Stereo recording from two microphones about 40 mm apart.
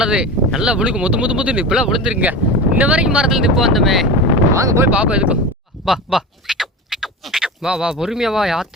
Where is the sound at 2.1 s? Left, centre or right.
Right.